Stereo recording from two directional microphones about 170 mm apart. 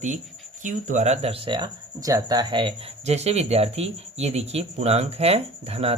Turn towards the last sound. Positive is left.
turn(degrees=-35)  # may be behind; listen again after turning